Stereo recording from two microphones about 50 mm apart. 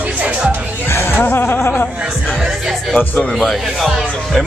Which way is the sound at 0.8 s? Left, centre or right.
Left.